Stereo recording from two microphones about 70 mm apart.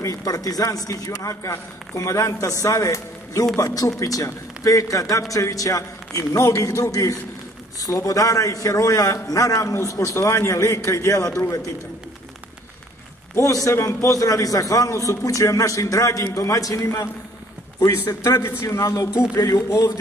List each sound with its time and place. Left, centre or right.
0.0 s a man's voice: left
13.3 s a man's voice: left
16.8 s a man's voice: left
18.8 s a man's voice: left